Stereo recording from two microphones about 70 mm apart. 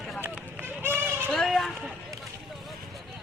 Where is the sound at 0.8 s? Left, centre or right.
Right.